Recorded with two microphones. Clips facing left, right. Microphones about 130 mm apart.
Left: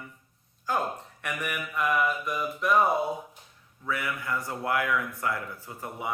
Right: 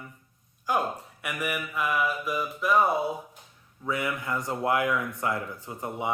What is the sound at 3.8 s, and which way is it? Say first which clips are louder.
Speech: right 2 dB; 20° right (ahead or behind).